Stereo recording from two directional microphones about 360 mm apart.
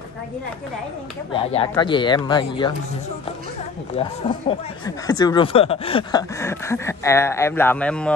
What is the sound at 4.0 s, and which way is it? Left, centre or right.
Speech, centre.